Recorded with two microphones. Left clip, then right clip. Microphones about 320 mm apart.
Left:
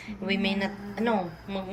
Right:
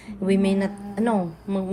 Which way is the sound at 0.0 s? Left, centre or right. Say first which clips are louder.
Right 6 dB; right.